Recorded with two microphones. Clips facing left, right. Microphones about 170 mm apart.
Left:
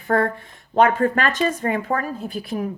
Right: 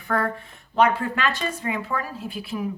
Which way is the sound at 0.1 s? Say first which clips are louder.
Left 5 dB; 40° left (ahead or behind).